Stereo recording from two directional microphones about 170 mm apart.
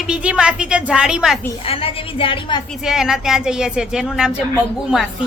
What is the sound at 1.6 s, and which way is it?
Speech, 35° left (ahead or behind).